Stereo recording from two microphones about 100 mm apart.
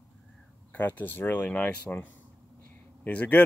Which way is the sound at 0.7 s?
15° left (ahead or behind).